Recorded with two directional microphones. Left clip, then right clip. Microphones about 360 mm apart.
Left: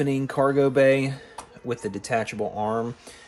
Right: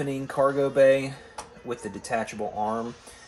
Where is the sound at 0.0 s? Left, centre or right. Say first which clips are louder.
Left 2 dB; centre.